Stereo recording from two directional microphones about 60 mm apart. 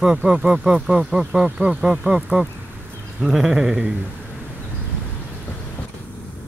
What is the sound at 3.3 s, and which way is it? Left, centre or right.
Speech, centre.